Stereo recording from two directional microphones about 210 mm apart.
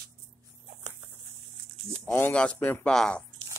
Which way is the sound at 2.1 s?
10° left (ahead or behind).